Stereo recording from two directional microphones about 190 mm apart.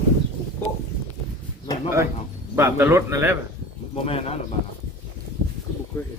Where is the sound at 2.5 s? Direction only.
15° right (ahead or behind).